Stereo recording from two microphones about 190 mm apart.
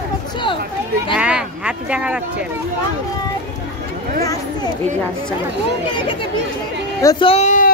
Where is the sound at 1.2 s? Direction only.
5° right (ahead or behind).